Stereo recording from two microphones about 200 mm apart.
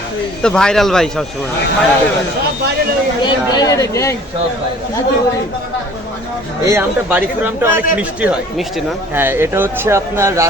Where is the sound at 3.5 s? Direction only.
20° left (ahead or behind).